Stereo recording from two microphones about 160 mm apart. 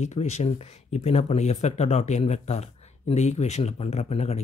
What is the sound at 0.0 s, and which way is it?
Speech, 45° left (ahead or behind).